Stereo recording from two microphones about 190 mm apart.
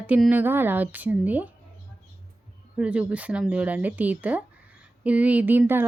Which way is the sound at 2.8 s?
5° right (ahead or behind).